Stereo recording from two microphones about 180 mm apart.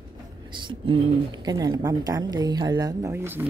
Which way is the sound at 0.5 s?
30° right (ahead or behind).